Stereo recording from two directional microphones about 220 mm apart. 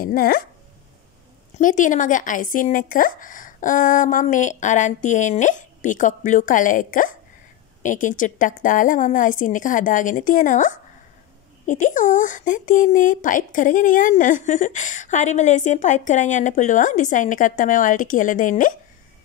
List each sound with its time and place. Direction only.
0.0 s speech: 40° left (ahead or behind)
1.6 s speech: 35° left (ahead or behind)